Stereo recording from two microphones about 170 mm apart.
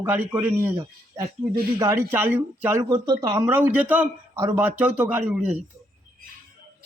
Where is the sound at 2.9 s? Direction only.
25° right (ahead or behind); by 5.5 s 5° right (ahead or behind).